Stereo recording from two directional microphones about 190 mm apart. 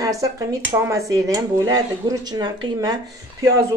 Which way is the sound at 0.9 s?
15° right (ahead or behind).